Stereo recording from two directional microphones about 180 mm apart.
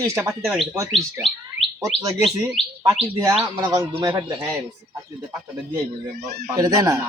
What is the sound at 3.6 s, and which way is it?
Fowl, 20° right (ahead or behind).